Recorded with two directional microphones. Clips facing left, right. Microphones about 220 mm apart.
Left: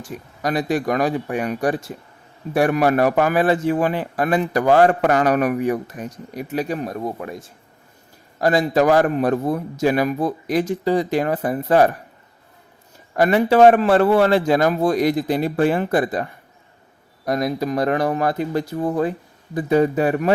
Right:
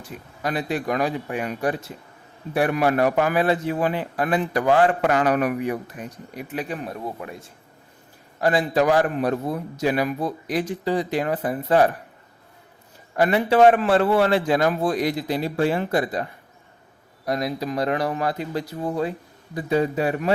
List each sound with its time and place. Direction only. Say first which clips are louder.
0.0 s a man's voice: left 4 dB; 45° left (ahead or behind)
8.4 s a man's voice: left 3 dB; 40° left (ahead or behind)
13.1 s a man's voice: left 3 dB; 45° left (ahead or behind)
17.2 s a man's voice: left 4 dB; 50° left (ahead or behind)